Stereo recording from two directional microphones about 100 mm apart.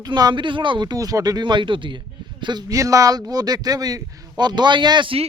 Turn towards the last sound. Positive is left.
turn(degrees=-60)  # may be behind; listen again after turning